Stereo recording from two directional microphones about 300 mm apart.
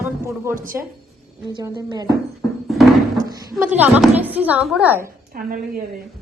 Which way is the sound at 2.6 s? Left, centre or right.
Centre.